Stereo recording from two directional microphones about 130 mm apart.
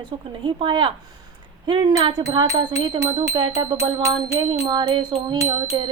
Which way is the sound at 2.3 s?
30° right (ahead or behind).